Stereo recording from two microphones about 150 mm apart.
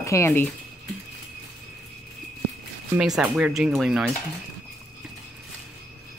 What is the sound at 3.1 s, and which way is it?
Speech, 10° right (ahead or behind).